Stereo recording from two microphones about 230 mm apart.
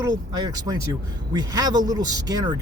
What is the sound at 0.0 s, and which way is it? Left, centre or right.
Speech, centre.